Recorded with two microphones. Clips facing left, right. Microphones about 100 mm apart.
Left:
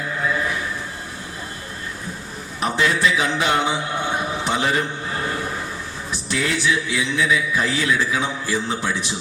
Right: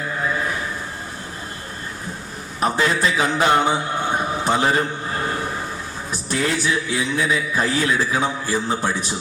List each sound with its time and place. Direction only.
2.6 s a man's voice: 40° right (ahead or behind)
4.2 s a sound: 40° right (ahead or behind)
6.1 s a man's voice: 40° right (ahead or behind)